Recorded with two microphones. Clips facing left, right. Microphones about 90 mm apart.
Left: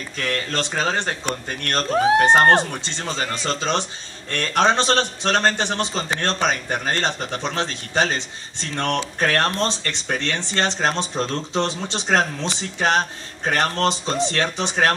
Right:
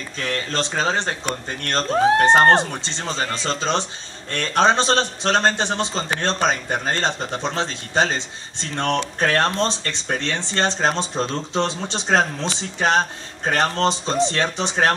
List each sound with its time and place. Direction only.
0.2 s speech: 25° right (ahead or behind)
1.9 s speech: centre (ahead or behind)
2.3 s speech: 20° right (ahead or behind)